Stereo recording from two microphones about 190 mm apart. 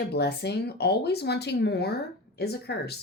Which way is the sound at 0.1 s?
60° left (ahead or behind).